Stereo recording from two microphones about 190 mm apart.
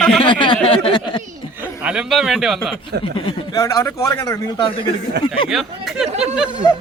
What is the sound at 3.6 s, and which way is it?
Speech, 15° left (ahead or behind).